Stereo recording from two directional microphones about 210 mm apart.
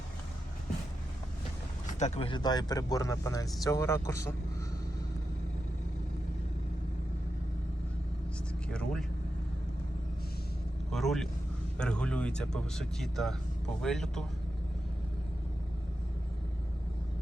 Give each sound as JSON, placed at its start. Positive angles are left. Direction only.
{"t": 1.9, "sound": "speech", "side_deg": 35}
{"t": 8.7, "sound": "vehicle", "side_deg": 5}
{"t": 10.9, "sound": "vehicle", "side_deg": 0}
{"t": 11.8, "sound": "speech", "side_deg": 5}